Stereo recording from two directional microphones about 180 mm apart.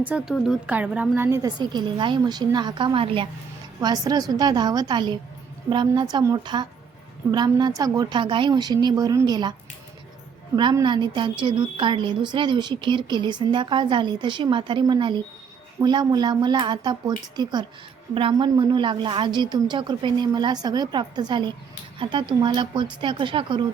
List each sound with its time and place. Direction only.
0.0 s a woman's voice: 5° right (ahead or behind); by 23.6 s 25° right (ahead or behind)